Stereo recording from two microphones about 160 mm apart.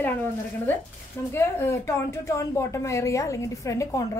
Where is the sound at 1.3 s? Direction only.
15° left (ahead or behind).